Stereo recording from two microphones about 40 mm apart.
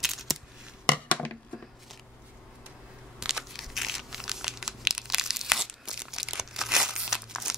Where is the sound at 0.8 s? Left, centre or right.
Left.